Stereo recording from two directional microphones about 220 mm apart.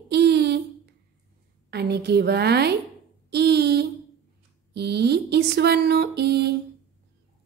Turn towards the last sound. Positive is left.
turn(degrees=-50)  # may be behind; listen again after turning